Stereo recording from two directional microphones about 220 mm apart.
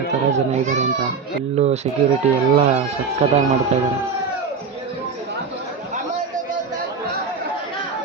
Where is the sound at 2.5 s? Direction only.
30° right (ahead or behind).